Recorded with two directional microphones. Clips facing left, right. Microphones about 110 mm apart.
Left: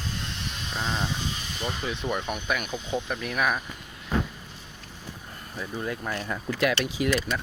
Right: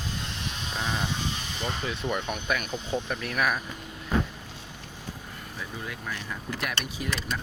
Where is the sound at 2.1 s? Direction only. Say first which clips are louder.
Even; 5° left (ahead or behind).